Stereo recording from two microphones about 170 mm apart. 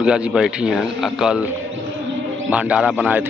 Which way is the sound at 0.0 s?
5° right (ahead or behind).